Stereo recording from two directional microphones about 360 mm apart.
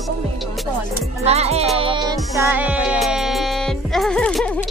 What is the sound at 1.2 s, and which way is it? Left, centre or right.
Speech, centre.